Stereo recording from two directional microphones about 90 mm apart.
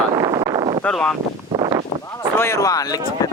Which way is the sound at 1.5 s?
50° right (ahead or behind).